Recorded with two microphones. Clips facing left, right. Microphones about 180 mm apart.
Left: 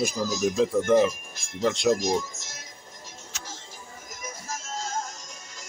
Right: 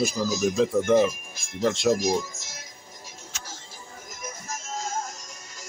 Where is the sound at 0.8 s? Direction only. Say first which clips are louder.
Even; 10° right (ahead or behind).